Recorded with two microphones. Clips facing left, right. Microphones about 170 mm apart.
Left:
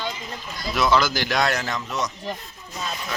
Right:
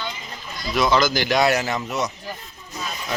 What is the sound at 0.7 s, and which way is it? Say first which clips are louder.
A man's voice: right 2 dB; centre (ahead or behind).